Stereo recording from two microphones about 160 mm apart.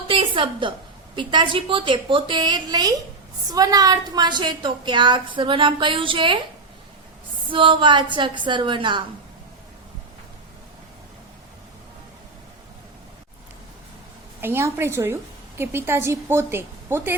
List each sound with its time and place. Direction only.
0.1 s a woman's voice: 35° right (ahead or behind)
7.4 s a woman's voice: 30° right (ahead or behind)
14.4 s a woman's voice: 15° right (ahead or behind)